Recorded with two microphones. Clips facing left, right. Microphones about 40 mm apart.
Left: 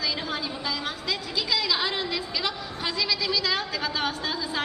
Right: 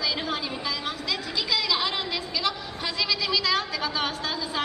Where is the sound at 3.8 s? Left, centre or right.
Right.